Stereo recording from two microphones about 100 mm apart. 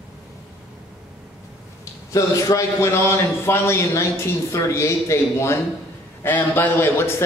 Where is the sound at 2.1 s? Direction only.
30° left (ahead or behind).